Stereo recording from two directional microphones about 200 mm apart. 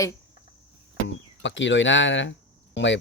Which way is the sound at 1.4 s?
65° left (ahead or behind).